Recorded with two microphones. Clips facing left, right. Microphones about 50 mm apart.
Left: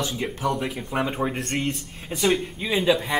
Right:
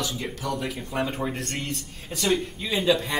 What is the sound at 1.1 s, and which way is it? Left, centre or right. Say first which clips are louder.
Speech: left 3 dB; centre.